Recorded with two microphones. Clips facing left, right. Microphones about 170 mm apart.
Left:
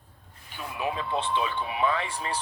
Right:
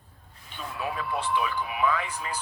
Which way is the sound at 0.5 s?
15° left (ahead or behind).